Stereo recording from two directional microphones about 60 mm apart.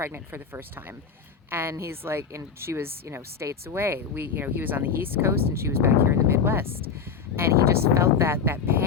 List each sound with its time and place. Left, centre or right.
0.0 s a woman's voice: right
3.7 s speech: right